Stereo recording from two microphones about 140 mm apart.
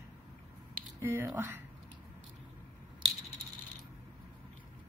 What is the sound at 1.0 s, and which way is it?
Speech, 20° right (ahead or behind).